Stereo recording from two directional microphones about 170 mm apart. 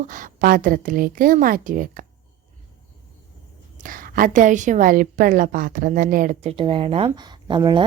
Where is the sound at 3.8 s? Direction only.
55° right (ahead or behind); by 7.8 s 25° right (ahead or behind).